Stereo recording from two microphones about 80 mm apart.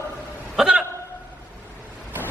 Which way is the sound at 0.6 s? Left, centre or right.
Centre.